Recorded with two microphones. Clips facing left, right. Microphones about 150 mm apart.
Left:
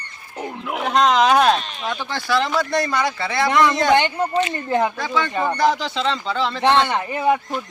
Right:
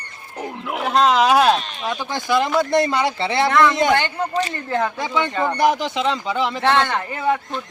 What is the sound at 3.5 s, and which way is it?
Speech, 15° left (ahead or behind).